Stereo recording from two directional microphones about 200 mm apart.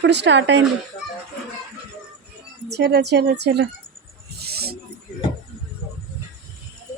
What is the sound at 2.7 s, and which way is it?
Speech, 55° right (ahead or behind).